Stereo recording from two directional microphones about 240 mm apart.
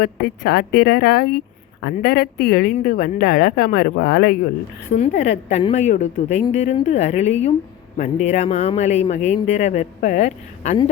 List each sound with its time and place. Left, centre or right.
0.0 s speech: left
4.9 s speech: left